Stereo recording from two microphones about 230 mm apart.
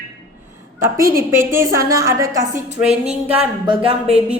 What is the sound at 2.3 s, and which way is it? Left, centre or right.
Speech, right.